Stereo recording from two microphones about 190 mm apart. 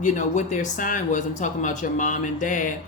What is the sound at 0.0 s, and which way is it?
Speech, 40° left (ahead or behind).